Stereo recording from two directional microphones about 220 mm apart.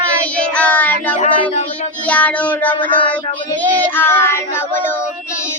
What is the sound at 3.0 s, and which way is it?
Cat, 25° left (ahead or behind).